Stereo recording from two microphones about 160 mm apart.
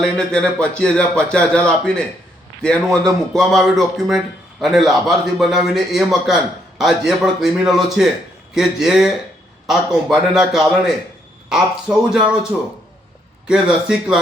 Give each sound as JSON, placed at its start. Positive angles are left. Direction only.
{"t": 0.0, "sound": "a man's voice", "side_deg": 5}
{"t": 13.5, "sound": "a man's voice", "side_deg": -5}